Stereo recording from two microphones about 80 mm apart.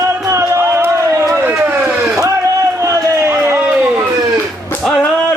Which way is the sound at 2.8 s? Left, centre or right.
Right.